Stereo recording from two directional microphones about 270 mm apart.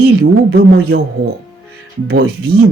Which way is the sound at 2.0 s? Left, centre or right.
Right.